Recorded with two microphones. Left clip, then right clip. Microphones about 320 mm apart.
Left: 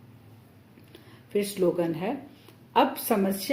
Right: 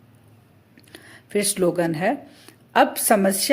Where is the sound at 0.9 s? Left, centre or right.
Right.